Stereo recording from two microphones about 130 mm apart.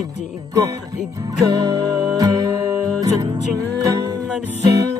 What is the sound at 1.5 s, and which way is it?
Music, 30° right (ahead or behind).